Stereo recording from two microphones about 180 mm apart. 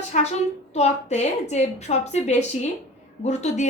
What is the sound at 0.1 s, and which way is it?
A woman's voice, 40° left (ahead or behind).